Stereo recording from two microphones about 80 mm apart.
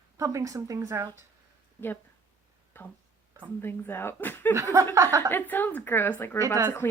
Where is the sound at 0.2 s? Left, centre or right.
Right.